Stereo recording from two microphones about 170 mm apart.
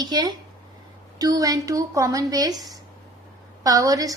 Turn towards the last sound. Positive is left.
turn(degrees=-20)  # may be behind; listen again after turning